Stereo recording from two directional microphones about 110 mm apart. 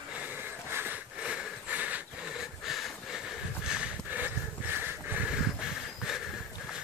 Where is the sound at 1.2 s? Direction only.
10° right (ahead or behind).